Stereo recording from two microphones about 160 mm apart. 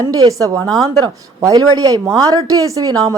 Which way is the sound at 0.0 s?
20° right (ahead or behind).